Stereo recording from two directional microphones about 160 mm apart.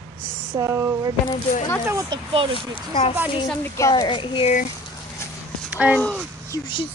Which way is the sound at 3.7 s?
20° left (ahead or behind).